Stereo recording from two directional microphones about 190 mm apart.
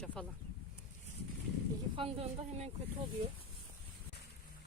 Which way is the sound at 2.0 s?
30° right (ahead or behind).